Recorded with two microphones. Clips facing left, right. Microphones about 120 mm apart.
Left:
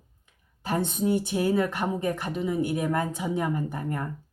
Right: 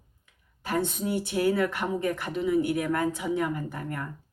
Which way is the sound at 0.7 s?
20° left (ahead or behind).